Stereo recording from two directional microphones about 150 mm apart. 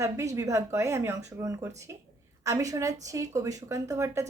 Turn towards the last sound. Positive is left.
turn(degrees=-20)  # may be behind; listen again after turning